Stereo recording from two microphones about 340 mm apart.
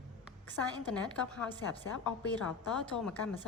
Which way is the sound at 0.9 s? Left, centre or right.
Centre.